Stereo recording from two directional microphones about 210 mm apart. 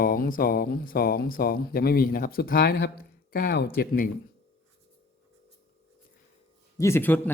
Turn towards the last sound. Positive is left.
turn(degrees=10)  # may be behind; listen again after turning